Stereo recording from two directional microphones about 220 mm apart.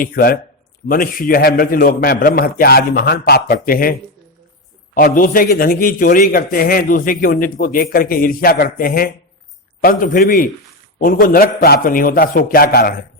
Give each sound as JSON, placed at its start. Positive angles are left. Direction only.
{"t": 0.0, "sound": "a man's voice", "side_deg": 45}
{"t": 4.9, "sound": "a man's voice", "side_deg": 40}